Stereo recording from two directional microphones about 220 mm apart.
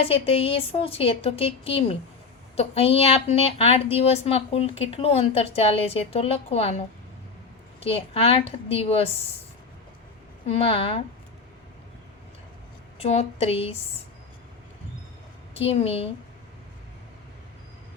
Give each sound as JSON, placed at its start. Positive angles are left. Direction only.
{"t": 0.0, "sound": "a woman's voice", "side_deg": 25}
{"t": 7.9, "sound": "a woman's voice", "side_deg": 25}
{"t": 10.4, "sound": "a woman's voice", "side_deg": 25}
{"t": 13.0, "sound": "a woman's voice", "side_deg": 30}
{"t": 15.5, "sound": "a woman's voice", "side_deg": 25}